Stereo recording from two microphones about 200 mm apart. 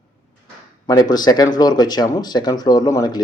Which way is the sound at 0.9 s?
20° left (ahead or behind).